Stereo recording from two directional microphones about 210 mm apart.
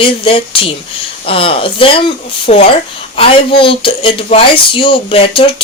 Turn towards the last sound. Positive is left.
turn(degrees=25)  # may be behind; listen again after turning